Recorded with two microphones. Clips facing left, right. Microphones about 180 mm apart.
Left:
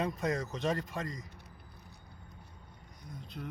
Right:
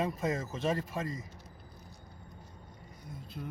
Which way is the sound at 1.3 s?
60° left (ahead or behind).